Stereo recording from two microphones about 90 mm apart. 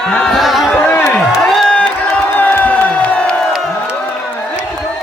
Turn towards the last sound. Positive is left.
turn(degrees=15)  # may be behind; listen again after turning